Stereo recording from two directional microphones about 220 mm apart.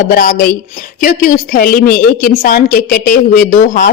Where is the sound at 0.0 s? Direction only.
40° left (ahead or behind).